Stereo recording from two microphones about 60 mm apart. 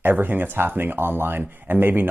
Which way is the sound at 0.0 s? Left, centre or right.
Right.